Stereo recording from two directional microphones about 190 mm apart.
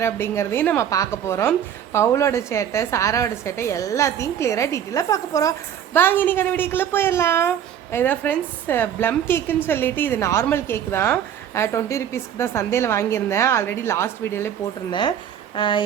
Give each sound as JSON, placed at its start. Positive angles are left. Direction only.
{"t": 0.0, "sound": "a woman's voice", "side_deg": 15}
{"t": 15.5, "sound": "speech", "side_deg": 25}